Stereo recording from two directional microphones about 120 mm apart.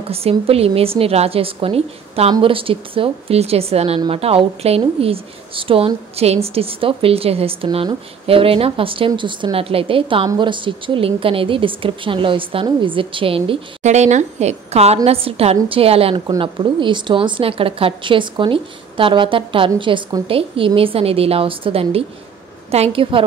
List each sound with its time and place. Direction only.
0.1 s a woman's voice: 55° right (ahead or behind)
13.8 s a woman's voice: 75° right (ahead or behind); by 16.2 s 55° right (ahead or behind)
16.3 s a woman's voice: 45° right (ahead or behind)